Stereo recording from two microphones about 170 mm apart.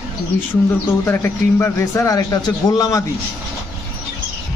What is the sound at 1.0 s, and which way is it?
A man's voice, 10° left (ahead or behind).